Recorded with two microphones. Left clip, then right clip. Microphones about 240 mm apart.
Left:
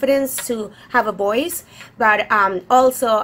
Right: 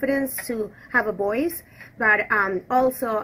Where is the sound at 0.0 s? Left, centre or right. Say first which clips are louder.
Left 7 dB; centre.